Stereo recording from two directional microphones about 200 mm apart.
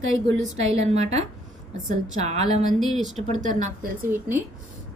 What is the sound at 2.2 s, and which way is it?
Speech, 35° right (ahead or behind).